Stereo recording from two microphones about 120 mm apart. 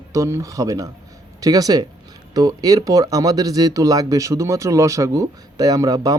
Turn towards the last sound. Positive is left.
turn(degrees=-30)  # may be behind; listen again after turning